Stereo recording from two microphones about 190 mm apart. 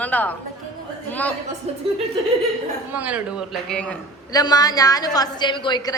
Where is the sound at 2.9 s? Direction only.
10° right (ahead or behind).